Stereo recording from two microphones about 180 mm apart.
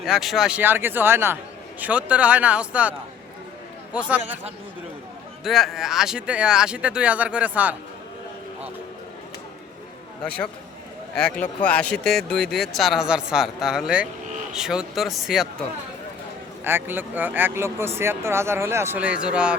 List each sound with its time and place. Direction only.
0.0 s speech: centre (ahead or behind)
5.4 s speech: centre (ahead or behind)
10.2 s a man's voice: 5° left (ahead or behind)
16.6 s speech: 10° right (ahead or behind)